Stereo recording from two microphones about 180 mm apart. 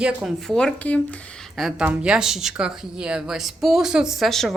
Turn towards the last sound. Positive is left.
turn(degrees=0)  # may be behind; listen again after turning